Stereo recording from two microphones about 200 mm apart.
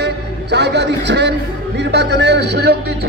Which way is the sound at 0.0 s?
55° right (ahead or behind).